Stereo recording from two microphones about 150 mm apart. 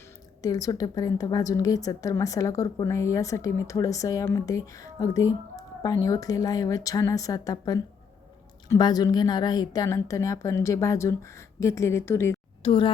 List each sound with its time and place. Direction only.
0.4 s a woman's voice: 25° left (ahead or behind)
12.6 s speech: 35° left (ahead or behind)